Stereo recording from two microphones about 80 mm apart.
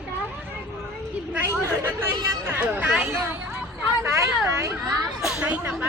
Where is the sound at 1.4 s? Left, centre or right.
Left.